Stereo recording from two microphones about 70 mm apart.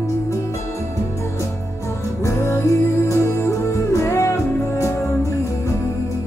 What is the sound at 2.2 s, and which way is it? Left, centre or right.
Music, left.